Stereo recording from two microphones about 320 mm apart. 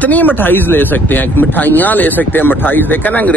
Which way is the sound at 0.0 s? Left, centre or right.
Centre.